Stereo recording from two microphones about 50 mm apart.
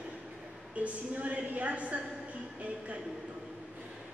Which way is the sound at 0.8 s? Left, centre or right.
Right.